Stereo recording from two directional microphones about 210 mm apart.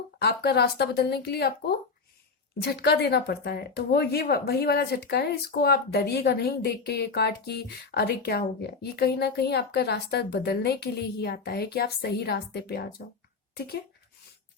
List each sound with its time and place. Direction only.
0.2 s speech: 50° left (ahead or behind)